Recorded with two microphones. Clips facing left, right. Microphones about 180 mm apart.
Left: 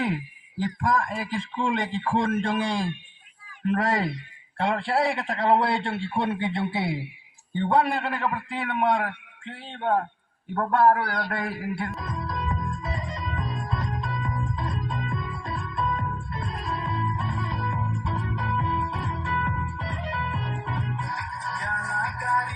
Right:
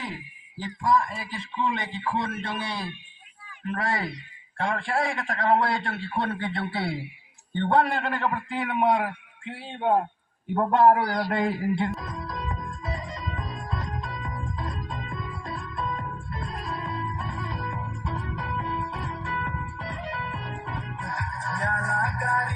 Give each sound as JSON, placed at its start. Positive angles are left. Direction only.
{"t": 0.6, "sound": "a man's voice", "side_deg": 55}
{"t": 7.5, "sound": "a man's voice", "side_deg": 10}
{"t": 11.9, "sound": "music", "side_deg": -35}